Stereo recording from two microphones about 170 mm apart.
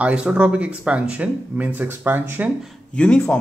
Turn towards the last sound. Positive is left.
turn(degrees=5)  # may be behind; listen again after turning